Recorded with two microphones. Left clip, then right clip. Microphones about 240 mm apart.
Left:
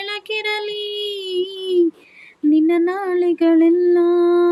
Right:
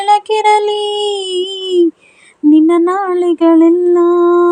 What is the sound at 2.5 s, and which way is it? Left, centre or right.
Humming, right.